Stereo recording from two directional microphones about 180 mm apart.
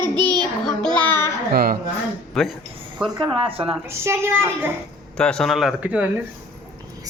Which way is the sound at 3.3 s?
30° right (ahead or behind).